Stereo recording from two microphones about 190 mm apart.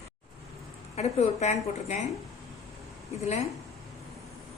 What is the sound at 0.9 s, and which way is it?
Speech, 35° left (ahead or behind).